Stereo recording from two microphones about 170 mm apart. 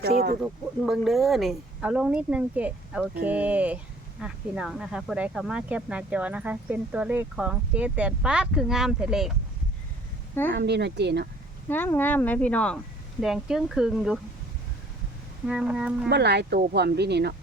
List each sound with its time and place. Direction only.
0.0 s speech: 65° right (ahead or behind)
0.4 s speech: centre (ahead or behind)
10.5 s speech: 85° right
11.7 s speech: 10° left (ahead or behind)
15.4 s speech: 5° right (ahead or behind)
16.0 s speech: 80° right